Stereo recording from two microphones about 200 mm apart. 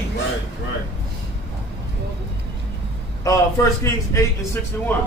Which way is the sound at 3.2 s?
15° left (ahead or behind).